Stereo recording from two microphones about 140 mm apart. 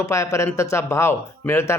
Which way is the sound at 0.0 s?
25° left (ahead or behind).